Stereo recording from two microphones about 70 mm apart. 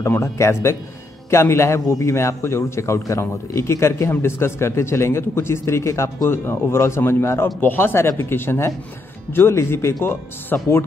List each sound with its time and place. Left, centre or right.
0.0 s speech: left